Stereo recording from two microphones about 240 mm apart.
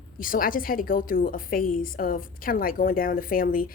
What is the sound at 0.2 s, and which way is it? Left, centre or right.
A woman's voice, left.